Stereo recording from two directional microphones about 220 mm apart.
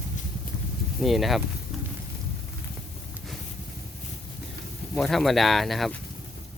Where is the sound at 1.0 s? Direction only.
Centre (ahead or behind).